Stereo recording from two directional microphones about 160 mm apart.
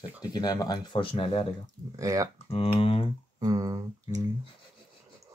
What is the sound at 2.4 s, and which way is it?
Speech, 35° left (ahead or behind).